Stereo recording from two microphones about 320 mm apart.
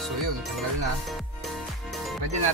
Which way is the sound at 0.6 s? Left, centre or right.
Centre.